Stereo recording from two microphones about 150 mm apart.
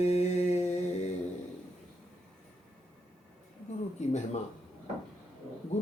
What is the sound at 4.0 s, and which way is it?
Mantra, 50° left (ahead or behind).